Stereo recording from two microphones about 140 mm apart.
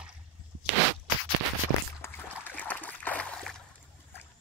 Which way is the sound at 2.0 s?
15° left (ahead or behind).